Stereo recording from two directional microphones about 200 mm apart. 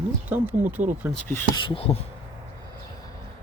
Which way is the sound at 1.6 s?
25° left (ahead or behind).